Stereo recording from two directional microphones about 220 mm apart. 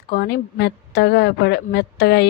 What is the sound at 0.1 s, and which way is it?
A woman's voice, 45° left (ahead or behind).